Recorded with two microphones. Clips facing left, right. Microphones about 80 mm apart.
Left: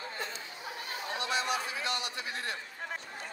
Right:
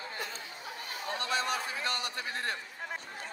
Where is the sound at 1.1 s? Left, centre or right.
Right.